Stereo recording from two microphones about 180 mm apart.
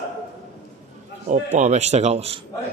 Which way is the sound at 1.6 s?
40° right (ahead or behind).